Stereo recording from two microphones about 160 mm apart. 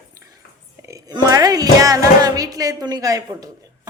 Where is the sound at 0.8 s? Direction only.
20° right (ahead or behind).